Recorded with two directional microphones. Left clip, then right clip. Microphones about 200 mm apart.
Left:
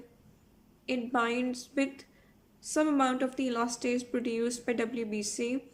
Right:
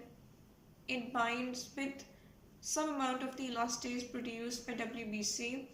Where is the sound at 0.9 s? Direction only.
50° left (ahead or behind).